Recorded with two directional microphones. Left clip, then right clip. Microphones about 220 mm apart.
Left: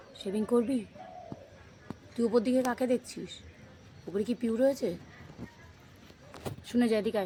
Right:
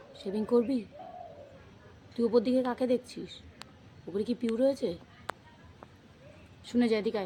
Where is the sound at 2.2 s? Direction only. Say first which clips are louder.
Right 1 dB; 20° left (ahead or behind).